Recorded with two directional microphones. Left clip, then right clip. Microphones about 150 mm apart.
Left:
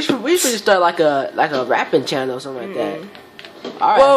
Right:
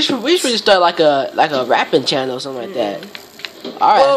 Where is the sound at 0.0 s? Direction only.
15° right (ahead or behind).